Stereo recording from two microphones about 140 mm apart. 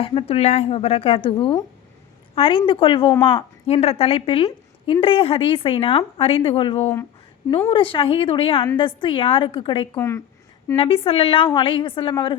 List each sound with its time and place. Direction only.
0.0 s a woman's voice: 40° left (ahead or behind)
10.0 s speech: 20° left (ahead or behind)
10.8 s a woman's voice: 40° left (ahead or behind)